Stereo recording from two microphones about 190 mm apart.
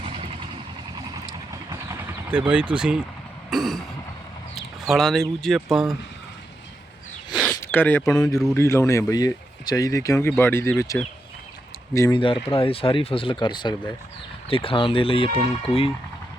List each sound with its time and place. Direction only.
1.7 s vehicle: 10° right (ahead or behind)
3.5 s speech: centre (ahead or behind)
4.9 s speech: centre (ahead or behind)
7.3 s a sound: centre (ahead or behind)
7.5 s speech: 10° left (ahead or behind); by 15.9 s 30° left (ahead or behind)